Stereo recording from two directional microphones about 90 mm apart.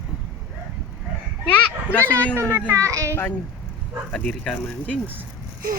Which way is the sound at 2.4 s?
25° right (ahead or behind).